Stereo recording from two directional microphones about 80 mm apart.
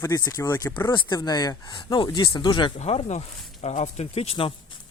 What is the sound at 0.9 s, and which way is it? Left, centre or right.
Speech, left.